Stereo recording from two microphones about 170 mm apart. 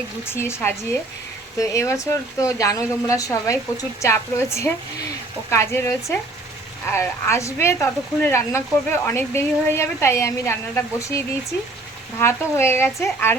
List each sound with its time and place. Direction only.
0.3 s speech: 15° left (ahead or behind)
12.2 s speech: 15° left (ahead or behind)